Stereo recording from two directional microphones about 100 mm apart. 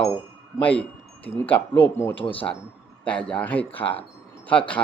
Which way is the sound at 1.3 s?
10° left (ahead or behind).